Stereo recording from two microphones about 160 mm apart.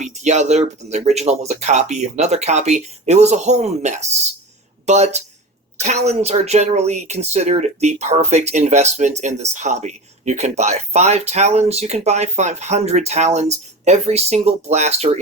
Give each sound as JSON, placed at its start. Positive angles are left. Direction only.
{"t": 0.0, "sound": "speech", "side_deg": -45}